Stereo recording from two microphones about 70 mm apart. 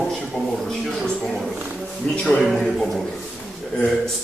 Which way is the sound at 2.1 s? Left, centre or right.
Centre.